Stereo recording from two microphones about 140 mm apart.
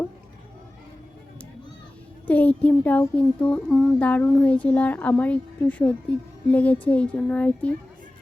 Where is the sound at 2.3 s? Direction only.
10° left (ahead or behind).